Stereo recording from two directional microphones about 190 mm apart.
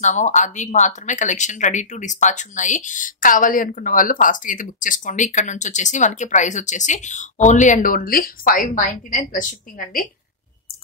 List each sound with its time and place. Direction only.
0.0 s a woman's voice: 40° left (ahead or behind)